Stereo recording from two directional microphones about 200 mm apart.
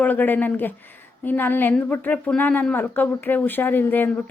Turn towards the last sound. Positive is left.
turn(degrees=10)  # may be behind; listen again after turning